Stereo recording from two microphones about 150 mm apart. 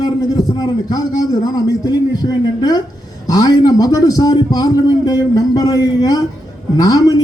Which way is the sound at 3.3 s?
25° left (ahead or behind).